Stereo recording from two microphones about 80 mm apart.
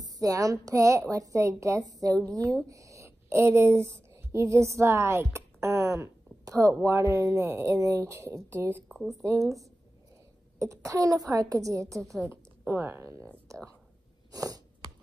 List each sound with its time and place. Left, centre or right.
0.0 s a woman's voice: right
9.2 s speech: right
10.6 s a woman's voice: right
12.0 s a woman's voice: centre
12.3 s speech: right
14.3 s a sound: right